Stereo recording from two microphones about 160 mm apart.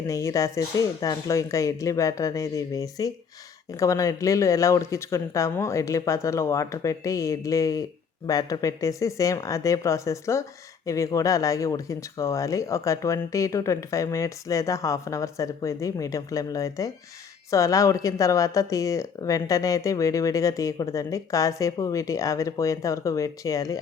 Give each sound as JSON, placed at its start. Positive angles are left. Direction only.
{"t": 0.1, "sound": "speech", "side_deg": 20}